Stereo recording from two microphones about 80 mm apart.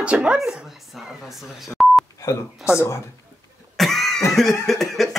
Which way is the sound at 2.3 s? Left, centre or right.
Left.